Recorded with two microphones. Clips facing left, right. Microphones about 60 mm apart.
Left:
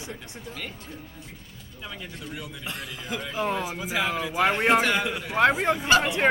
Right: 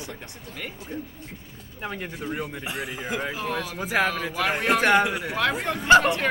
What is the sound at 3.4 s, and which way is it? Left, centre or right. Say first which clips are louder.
Speech: left 2 dB; centre.